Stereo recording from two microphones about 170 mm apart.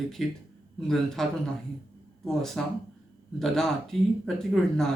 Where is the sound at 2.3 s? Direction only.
Centre (ahead or behind).